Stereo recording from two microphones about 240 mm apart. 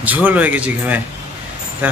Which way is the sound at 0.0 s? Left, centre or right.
Centre.